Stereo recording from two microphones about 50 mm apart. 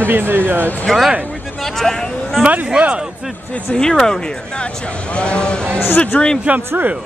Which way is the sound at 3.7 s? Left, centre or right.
Centre.